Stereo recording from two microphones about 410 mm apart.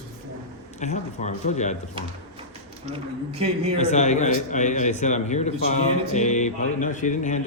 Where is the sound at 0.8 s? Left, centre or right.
Centre.